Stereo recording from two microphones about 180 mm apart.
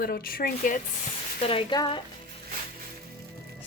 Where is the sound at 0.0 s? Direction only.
55° left (ahead or behind).